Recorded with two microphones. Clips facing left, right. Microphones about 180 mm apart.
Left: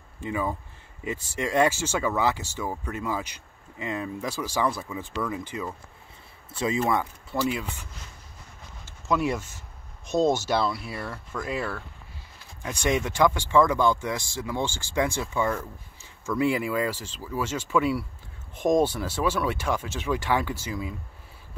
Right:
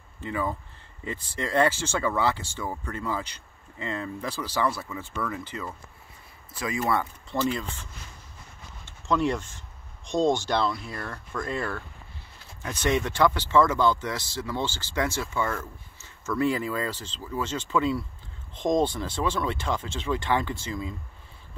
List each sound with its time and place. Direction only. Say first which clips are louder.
0.2 s speech: left 1 dB; 15° left (ahead or behind)
6.5 s speech: left 4 dB; 25° left (ahead or behind)
6.9 s speech: left 1 dB; 10° left (ahead or behind)
9.0 s speech: even; 10° left (ahead or behind)